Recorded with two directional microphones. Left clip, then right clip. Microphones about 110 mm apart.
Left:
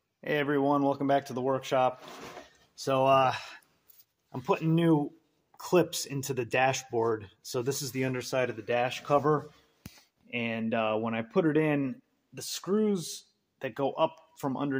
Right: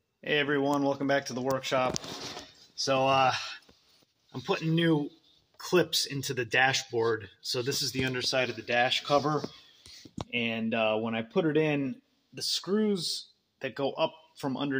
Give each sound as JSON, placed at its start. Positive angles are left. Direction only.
{"t": 0.2, "sound": "a man's voice", "side_deg": 15}